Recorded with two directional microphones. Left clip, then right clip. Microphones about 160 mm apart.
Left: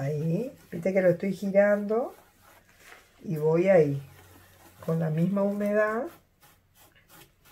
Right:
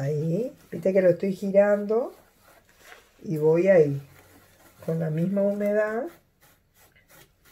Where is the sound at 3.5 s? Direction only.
35° right (ahead or behind).